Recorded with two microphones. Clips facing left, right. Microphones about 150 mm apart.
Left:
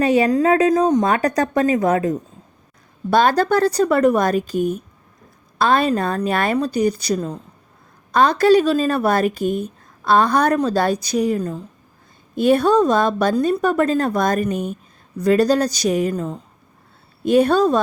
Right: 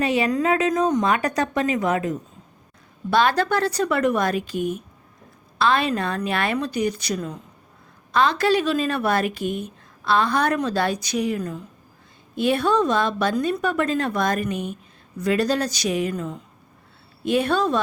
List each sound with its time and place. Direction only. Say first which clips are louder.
0.0 s a woman's voice: left 5 dB; 40° left (ahead or behind)